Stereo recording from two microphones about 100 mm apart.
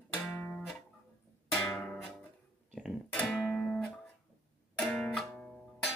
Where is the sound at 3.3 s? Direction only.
5° left (ahead or behind).